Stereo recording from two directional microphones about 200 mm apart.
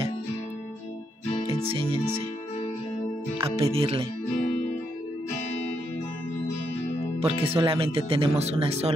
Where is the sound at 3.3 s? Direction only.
25° right (ahead or behind).